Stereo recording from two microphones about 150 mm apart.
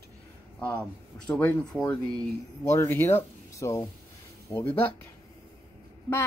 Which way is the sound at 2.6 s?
20° left (ahead or behind).